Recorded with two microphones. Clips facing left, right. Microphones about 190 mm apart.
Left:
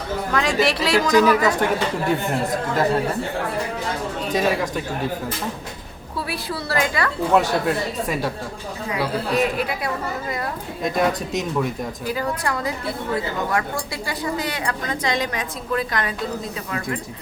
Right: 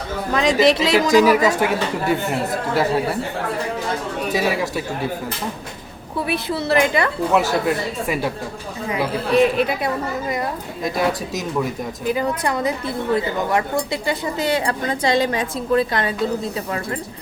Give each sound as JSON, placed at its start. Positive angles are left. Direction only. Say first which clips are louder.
{"t": 0.3, "sound": "a woman's voice", "louder": "right 5 dB", "side_deg": -20}
{"t": 4.3, "sound": "speech", "louder": "even", "side_deg": -5}
{"t": 6.1, "sound": "a woman's voice", "louder": "right 5 dB", "side_deg": -20}
{"t": 8.0, "sound": "speech", "louder": "right 4 dB", "side_deg": -10}
{"t": 8.9, "sound": "a woman's voice", "louder": "right 3 dB", "side_deg": -20}
{"t": 10.8, "sound": "speech", "louder": "even", "side_deg": 0}
{"t": 12.0, "sound": "a woman's voice", "louder": "right 4 dB", "side_deg": -20}